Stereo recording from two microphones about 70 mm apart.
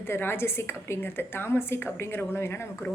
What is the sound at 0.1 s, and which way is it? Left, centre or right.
A woman's voice, left.